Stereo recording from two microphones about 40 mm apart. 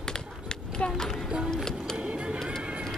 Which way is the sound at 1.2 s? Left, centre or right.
Centre.